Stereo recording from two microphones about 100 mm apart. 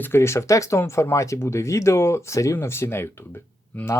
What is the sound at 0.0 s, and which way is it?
Speech, 25° left (ahead or behind).